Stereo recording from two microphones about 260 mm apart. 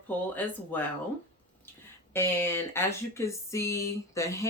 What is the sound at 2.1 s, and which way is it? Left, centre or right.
Speech, centre.